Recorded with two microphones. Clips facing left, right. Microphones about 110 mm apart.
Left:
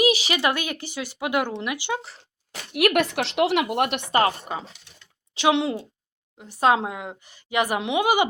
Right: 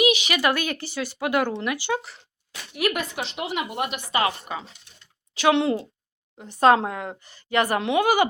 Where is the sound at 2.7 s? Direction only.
70° left (ahead or behind).